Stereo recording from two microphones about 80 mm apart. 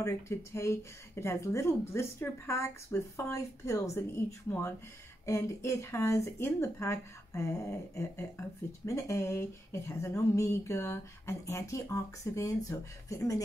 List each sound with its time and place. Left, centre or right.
0.0 s speech: left
5.2 s speech: left